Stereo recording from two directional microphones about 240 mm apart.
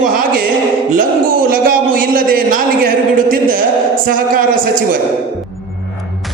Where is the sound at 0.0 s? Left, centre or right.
Right.